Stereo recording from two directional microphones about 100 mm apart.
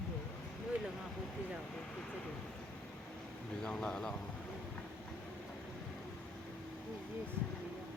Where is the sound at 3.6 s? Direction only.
5° left (ahead or behind).